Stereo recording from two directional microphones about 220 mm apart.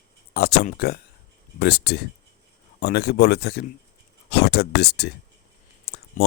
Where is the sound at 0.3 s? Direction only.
45° left (ahead or behind).